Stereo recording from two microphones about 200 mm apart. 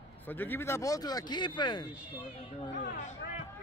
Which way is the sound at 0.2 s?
10° left (ahead or behind).